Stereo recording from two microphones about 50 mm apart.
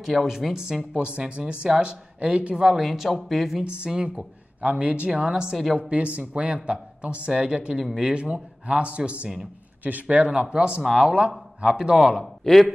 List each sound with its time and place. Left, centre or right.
0.0 s speech: centre
1.0 s speech: right
2.5 s speech: centre
3.6 s speech: centre
5.8 s speech: right
9.8 s speech: right
10.8 s speech: centre
11.1 s speech: centre